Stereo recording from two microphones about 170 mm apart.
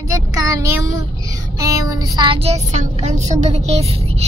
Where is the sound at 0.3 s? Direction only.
15° right (ahead or behind); by 4.3 s 40° right (ahead or behind).